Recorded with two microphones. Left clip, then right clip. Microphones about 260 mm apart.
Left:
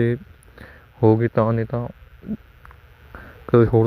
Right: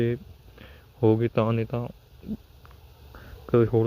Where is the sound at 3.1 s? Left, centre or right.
Left.